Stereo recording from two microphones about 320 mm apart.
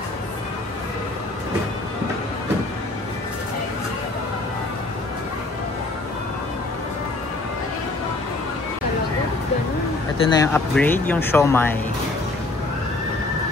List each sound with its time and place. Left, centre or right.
10.3 s speech: centre